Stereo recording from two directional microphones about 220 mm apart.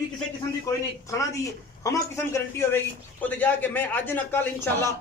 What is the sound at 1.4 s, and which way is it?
A man's voice, 15° left (ahead or behind).